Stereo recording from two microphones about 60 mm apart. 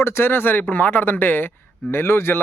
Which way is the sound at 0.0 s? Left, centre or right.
Left.